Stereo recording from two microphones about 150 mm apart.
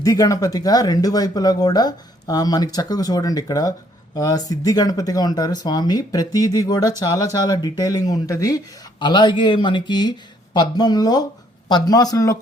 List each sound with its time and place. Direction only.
0.0 s speech: 25° left (ahead or behind)